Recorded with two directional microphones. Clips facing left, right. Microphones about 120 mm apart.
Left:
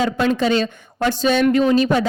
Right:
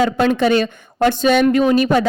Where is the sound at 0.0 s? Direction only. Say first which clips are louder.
Right 3 dB; 60° right (ahead or behind).